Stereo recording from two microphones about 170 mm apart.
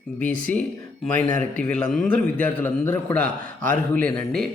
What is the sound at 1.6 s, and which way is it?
A man's voice, 5° left (ahead or behind).